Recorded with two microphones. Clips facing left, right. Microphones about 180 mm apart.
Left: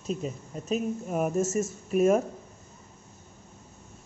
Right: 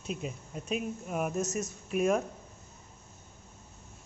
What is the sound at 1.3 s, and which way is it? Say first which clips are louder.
Speech: left 6 dB; 5° left (ahead or behind).